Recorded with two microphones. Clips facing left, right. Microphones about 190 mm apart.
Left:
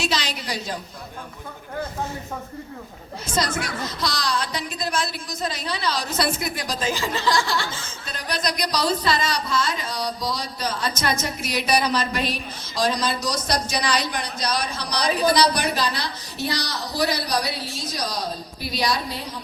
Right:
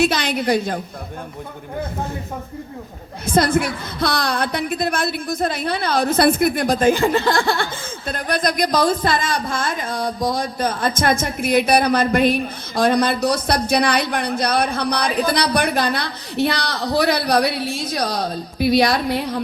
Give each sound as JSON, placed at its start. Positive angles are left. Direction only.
{"t": 0.0, "sound": "a woman's voice", "side_deg": -55}
{"t": 3.2, "sound": "a woman's voice", "side_deg": -55}